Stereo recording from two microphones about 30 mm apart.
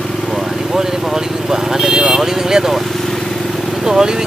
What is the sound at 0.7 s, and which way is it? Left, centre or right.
Speech, centre.